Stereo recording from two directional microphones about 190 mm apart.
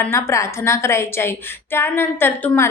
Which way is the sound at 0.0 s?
15° left (ahead or behind).